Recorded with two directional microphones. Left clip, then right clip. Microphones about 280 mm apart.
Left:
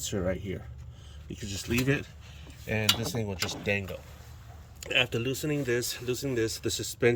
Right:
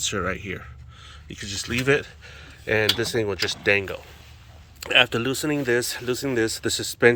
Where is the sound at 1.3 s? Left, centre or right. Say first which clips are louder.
Right 6 dB; right.